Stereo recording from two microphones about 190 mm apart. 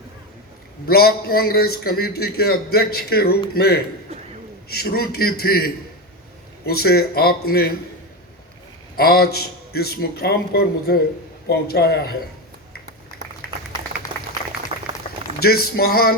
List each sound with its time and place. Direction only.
0.9 s a man's voice: 55° left (ahead or behind)
9.0 s a man's voice: 55° left (ahead or behind)
15.4 s a man's voice: 55° left (ahead or behind)